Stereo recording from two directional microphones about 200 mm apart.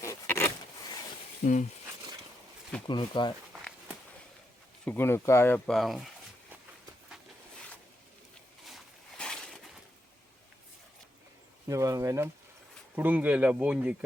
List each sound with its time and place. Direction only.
0.0 s a sound: 15° left (ahead or behind)
1.4 s speech: 35° left (ahead or behind)
2.8 s speech: 25° left (ahead or behind)
4.9 s speech: 10° left (ahead or behind)
8.6 s a sound: centre (ahead or behind)
11.7 s speech: 15° right (ahead or behind)